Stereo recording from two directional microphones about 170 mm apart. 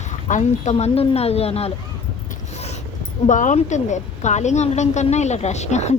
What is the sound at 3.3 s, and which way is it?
A woman's voice, 45° left (ahead or behind).